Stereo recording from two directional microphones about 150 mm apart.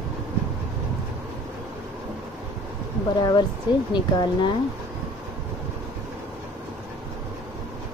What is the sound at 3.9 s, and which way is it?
Speech, 30° left (ahead or behind).